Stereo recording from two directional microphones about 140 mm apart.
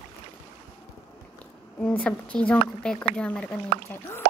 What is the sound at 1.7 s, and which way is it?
Speech, 10° left (ahead or behind).